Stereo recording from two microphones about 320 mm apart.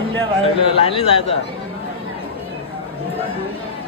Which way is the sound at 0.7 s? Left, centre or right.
Centre.